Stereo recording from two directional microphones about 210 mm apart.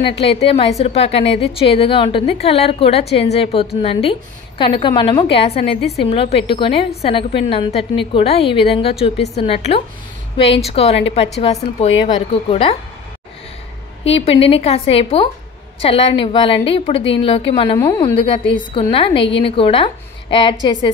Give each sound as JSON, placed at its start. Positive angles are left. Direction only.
{"t": 0.0, "sound": "a woman's voice", "side_deg": 25}
{"t": 14.4, "sound": "a woman's voice", "side_deg": 25}
{"t": 17.7, "sound": "a woman's voice", "side_deg": 15}